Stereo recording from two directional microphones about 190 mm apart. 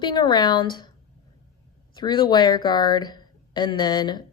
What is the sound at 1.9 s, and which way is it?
Speech, 20° left (ahead or behind).